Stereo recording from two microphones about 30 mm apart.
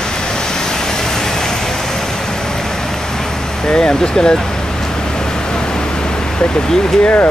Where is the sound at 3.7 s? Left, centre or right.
Left.